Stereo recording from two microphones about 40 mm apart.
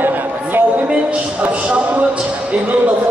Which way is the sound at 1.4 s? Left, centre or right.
Right.